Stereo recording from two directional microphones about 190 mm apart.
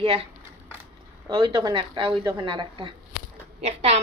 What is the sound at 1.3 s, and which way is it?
A woman's voice, 25° right (ahead or behind).